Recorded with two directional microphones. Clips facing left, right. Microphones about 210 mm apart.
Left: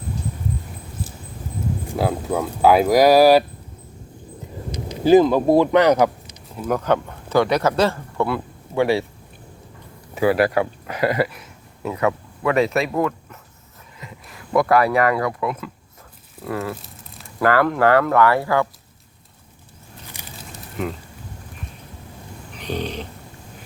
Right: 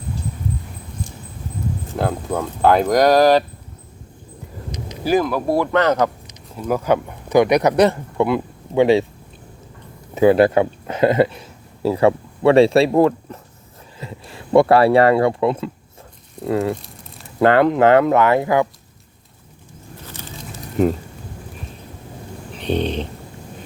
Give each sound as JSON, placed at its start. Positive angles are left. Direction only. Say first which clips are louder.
{"t": 1.9, "sound": "speech", "louder": "even", "side_deg": 5}
{"t": 4.7, "sound": "speech", "louder": "left 5 dB", "side_deg": 25}
{"t": 6.7, "sound": "speech", "louder": "right 2 dB", "side_deg": -10}
{"t": 10.2, "sound": "speech", "louder": "right 5 dB", "side_deg": -25}
{"t": 16.7, "sound": "a sound", "louder": "right 3 dB", "side_deg": 0}
{"t": 17.4, "sound": "speech", "louder": "right 4 dB", "side_deg": -20}
{"t": 20.1, "sound": "a sound", "louder": "right 5 dB", "side_deg": 15}
{"t": 20.8, "sound": "speech", "louder": "right 10 dB", "side_deg": -40}
{"t": 22.6, "sound": "a sound", "louder": "right 6 dB", "side_deg": -25}